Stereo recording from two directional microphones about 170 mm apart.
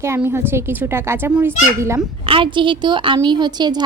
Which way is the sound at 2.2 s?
30° right (ahead or behind).